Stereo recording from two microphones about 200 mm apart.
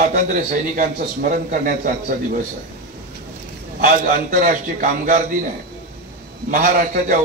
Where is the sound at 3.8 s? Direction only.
45° right (ahead or behind).